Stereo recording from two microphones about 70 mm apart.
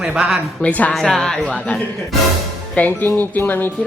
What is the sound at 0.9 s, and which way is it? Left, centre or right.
Speech, centre.